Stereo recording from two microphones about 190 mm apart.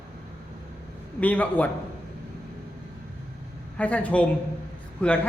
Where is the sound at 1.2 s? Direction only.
10° left (ahead or behind).